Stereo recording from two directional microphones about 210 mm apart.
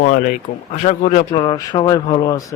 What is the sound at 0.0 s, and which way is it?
A man's voice, 35° left (ahead or behind).